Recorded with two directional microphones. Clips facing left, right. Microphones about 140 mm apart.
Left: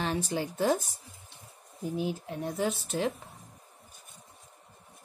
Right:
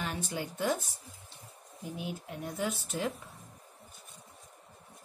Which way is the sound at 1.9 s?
35° left (ahead or behind).